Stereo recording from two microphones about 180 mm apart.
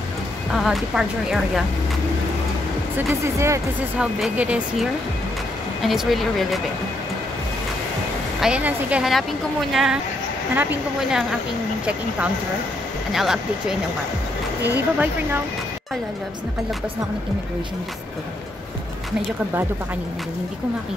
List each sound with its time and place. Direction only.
0.6 s a woman's voice: centre (ahead or behind)
3.2 s speech: 15° right (ahead or behind)
4.2 s a woman's voice: 5° right (ahead or behind)
8.4 s a woman's voice: 5° right (ahead or behind)
13.1 s a woman's voice: centre (ahead or behind)